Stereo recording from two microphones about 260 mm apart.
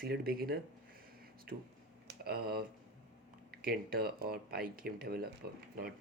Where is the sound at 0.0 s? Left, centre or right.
Right.